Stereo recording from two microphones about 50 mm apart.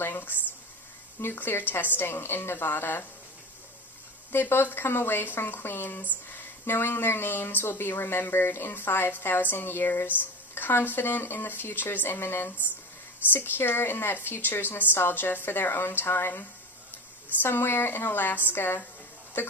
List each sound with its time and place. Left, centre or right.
0.0 s a sound: left
1.2 s speech: left
4.3 s speech: left